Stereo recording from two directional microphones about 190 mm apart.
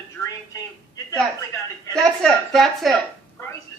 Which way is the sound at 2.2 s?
Centre (ahead or behind).